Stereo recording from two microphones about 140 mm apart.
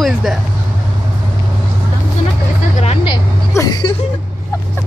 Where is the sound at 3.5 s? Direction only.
30° left (ahead or behind).